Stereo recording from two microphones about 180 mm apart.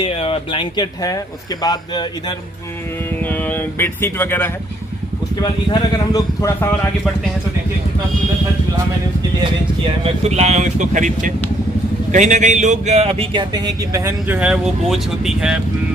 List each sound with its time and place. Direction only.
0.0 s speech: 30° left (ahead or behind)
3.2 s speech: 10° left (ahead or behind)
9.4 s speech: 30° right (ahead or behind); by 15.6 s 5° right (ahead or behind)